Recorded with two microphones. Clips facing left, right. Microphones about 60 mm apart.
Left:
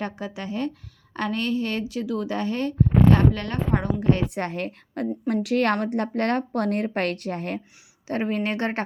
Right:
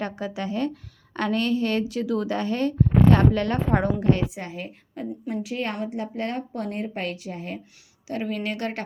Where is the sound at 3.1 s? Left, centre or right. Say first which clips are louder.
Right 1 dB; centre.